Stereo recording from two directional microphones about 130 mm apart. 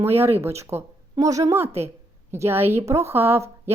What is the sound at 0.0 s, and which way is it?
A woman's voice, 20° right (ahead or behind).